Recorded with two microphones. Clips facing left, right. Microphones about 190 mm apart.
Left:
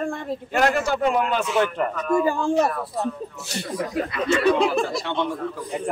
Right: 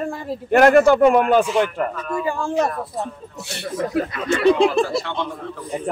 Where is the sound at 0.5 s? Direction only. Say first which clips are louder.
Right 9 dB; 55° right (ahead or behind).